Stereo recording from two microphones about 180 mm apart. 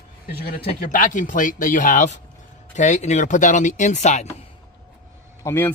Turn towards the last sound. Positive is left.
turn(degrees=15)  # may be behind; listen again after turning